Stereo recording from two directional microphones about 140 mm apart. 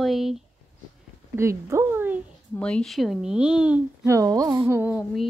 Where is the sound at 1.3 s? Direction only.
20° right (ahead or behind).